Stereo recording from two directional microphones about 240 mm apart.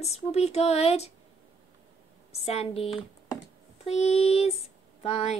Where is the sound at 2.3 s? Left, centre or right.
Left.